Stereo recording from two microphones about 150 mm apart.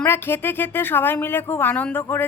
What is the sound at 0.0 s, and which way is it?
A woman's voice, 15° left (ahead or behind).